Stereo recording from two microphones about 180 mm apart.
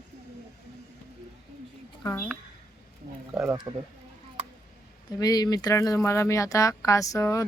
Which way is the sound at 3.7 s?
15° right (ahead or behind).